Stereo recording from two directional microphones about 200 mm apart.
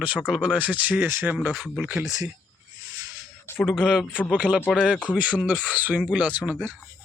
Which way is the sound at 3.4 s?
10° left (ahead or behind).